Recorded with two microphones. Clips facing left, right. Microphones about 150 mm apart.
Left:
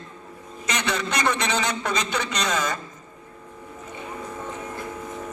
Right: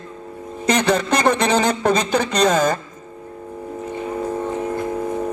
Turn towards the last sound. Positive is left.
turn(degrees=-45)  # may be behind; listen again after turning